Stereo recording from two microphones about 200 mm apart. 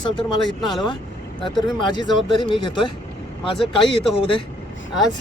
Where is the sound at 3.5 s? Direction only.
Centre (ahead or behind).